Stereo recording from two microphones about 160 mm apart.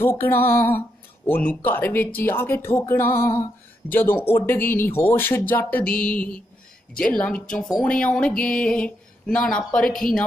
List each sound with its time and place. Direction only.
0.0 s speech: 15° left (ahead or behind)